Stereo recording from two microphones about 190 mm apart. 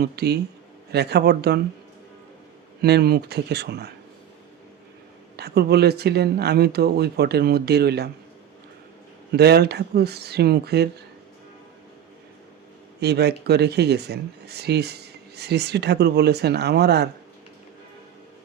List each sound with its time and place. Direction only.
0.0 s speech: 60° right (ahead or behind)
2.8 s speech: 55° right (ahead or behind)
5.4 s speech: 60° right (ahead or behind)
9.3 s speech: 60° right (ahead or behind)
13.0 s speech: 60° right (ahead or behind)